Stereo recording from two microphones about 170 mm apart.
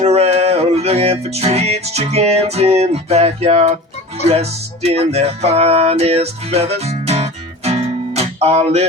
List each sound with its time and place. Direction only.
0.0 s music: 35° right (ahead or behind)